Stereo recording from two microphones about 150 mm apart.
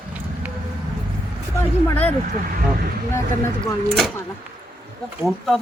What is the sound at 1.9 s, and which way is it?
Speech, 10° left (ahead or behind).